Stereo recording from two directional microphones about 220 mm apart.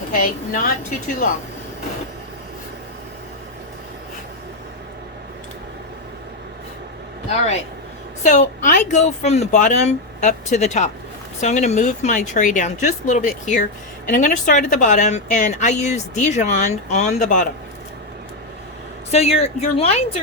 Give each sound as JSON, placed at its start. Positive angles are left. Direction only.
{"t": 0.1, "sound": "a woman's voice", "side_deg": 40}
{"t": 8.2, "sound": "a woman's voice", "side_deg": 35}
{"t": 19.1, "sound": "a woman's voice", "side_deg": 30}